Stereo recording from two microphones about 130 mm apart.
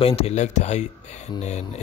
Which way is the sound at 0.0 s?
50° left (ahead or behind).